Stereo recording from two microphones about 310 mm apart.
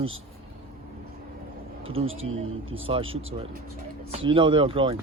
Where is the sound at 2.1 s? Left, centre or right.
Right.